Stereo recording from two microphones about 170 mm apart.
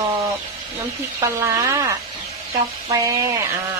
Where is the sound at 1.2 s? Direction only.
20° right (ahead or behind).